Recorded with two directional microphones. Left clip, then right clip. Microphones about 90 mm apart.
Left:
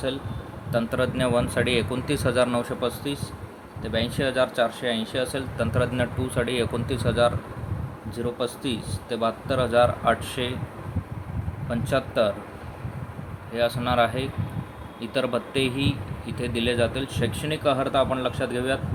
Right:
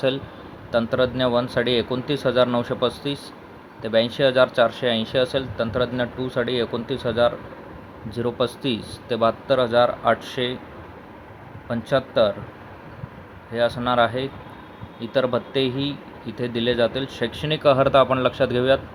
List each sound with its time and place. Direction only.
0.7 s speech: 30° right (ahead or behind)
2.6 s speech: 40° right (ahead or behind)
5.5 s speech: 15° right (ahead or behind)
8.1 s speech: 60° right (ahead or behind)
9.6 s speech: 25° right (ahead or behind)
11.7 s speech: 25° right (ahead or behind)
13.5 s speech: 30° right (ahead or behind)
17.4 s speech: 55° right (ahead or behind)
17.7 s a man's voice: 80° right
18.4 s speech: 45° right (ahead or behind)